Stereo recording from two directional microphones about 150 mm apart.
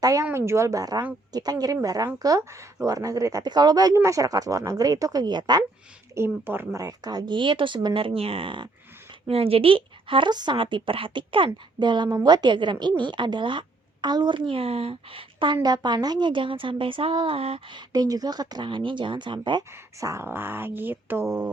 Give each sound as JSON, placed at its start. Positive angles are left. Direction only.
{"t": 0.0, "sound": "a woman's voice", "side_deg": -20}
{"t": 6.1, "sound": "a woman's voice", "side_deg": -15}